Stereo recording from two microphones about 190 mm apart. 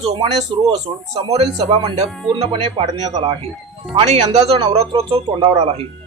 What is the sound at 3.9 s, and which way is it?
Speech, 30° right (ahead or behind).